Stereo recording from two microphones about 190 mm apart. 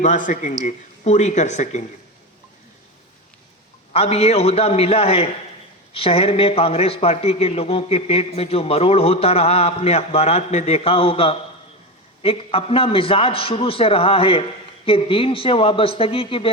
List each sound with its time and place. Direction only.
0.0 s a man's voice: 40° left (ahead or behind)
3.9 s a man's voice: 35° left (ahead or behind)